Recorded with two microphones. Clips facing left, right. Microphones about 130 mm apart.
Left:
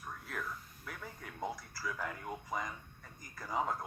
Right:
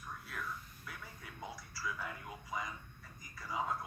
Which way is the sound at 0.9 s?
55° left (ahead or behind).